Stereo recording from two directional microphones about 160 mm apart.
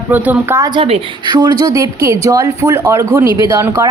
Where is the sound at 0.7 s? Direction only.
30° right (ahead or behind).